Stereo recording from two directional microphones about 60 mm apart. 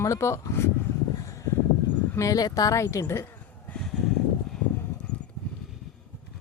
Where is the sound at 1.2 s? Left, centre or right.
Left.